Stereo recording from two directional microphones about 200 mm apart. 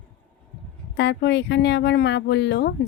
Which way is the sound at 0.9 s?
60° left (ahead or behind).